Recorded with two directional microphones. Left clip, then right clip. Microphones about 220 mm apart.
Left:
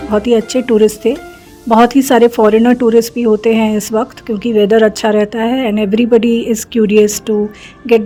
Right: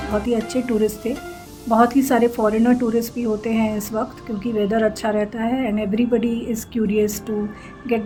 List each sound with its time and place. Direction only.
0.1 s speech: 40° left (ahead or behind)